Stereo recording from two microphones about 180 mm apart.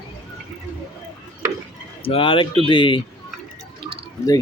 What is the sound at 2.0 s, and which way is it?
Speech, 30° left (ahead or behind).